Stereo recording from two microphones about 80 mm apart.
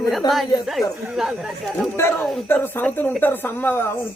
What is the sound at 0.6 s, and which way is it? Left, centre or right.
Speech, centre.